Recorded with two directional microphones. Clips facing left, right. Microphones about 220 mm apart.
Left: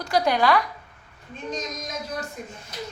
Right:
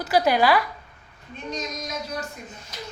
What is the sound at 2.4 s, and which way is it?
Speech, 40° left (ahead or behind).